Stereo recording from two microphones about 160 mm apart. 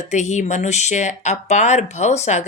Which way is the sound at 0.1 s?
50° left (ahead or behind).